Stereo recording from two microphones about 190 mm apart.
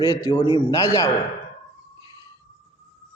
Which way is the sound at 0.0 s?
20° left (ahead or behind).